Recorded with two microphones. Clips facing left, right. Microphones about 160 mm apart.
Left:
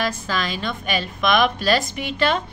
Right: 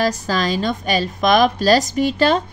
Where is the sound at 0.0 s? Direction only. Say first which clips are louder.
Right 5 dB; 40° right (ahead or behind).